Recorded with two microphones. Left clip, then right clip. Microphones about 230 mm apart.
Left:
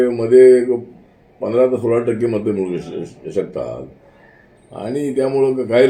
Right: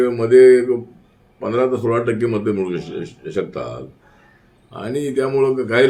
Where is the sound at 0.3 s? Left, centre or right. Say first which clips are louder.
Left 1 dB; centre.